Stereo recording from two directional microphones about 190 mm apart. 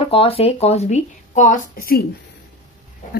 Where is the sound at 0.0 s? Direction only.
30° left (ahead or behind); by 2.0 s 50° left (ahead or behind).